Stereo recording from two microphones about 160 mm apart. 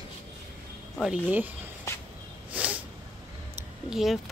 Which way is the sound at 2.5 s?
5° right (ahead or behind).